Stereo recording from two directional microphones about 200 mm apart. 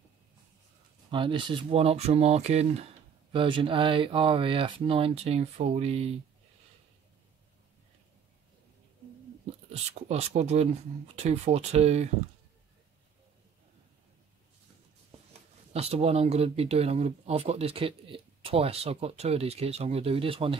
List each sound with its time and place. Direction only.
1.1 s speech: 25° right (ahead or behind)
10.0 s speech: 35° right (ahead or behind)
15.7 s speech: 30° right (ahead or behind)